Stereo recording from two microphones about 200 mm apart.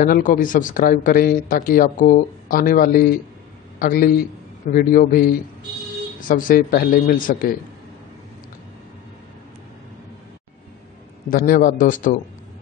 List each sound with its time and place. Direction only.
0.0 s speech: 45° left (ahead or behind)
11.2 s speech: 45° left (ahead or behind)